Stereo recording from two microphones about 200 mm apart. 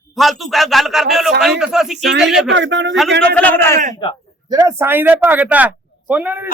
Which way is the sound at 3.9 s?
20° left (ahead or behind).